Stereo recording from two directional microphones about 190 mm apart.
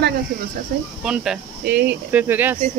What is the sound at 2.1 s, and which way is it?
Speech, 10° right (ahead or behind).